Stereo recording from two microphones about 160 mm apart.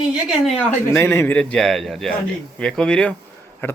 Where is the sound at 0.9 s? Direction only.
15° left (ahead or behind).